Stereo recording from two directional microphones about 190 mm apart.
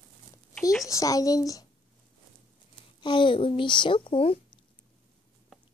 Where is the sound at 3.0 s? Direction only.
25° left (ahead or behind).